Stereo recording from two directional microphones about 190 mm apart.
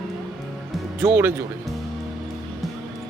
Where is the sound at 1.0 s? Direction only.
10° right (ahead or behind).